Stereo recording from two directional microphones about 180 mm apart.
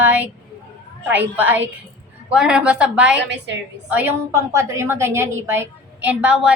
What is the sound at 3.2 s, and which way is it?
Speech, 70° right (ahead or behind).